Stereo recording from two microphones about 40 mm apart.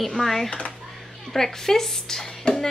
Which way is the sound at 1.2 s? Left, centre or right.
Centre.